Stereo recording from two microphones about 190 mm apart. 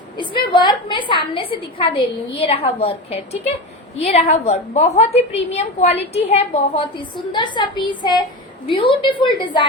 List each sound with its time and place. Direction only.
0.2 s a woman's voice: 25° left (ahead or behind)